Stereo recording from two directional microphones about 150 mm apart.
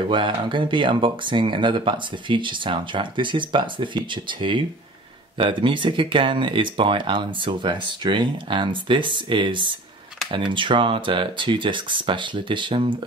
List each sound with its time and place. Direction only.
0.0 s speech: 35° right (ahead or behind)